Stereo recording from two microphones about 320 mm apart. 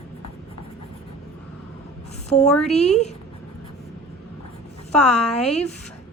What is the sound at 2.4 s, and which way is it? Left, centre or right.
Speech, centre.